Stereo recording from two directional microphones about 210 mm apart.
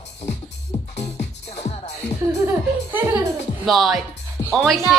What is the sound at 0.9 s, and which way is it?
Music, 30° left (ahead or behind).